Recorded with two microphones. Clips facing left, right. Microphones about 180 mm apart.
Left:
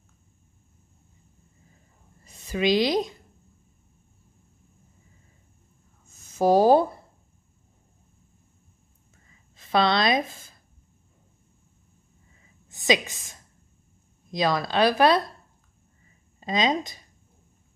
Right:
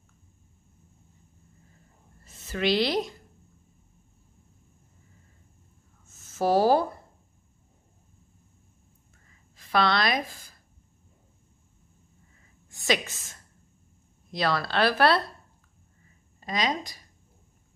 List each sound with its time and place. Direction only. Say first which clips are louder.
2.2 s a woman's voice: left 3 dB; 15° left (ahead or behind)
6.0 s a sound: left 4 dB; 15° left (ahead or behind)
9.6 s a woman's voice: left 2 dB; 20° left (ahead or behind)
12.6 s a woman's voice: left 4 dB; 20° left (ahead or behind)
16.3 s speech: left 4 dB; 20° left (ahead or behind)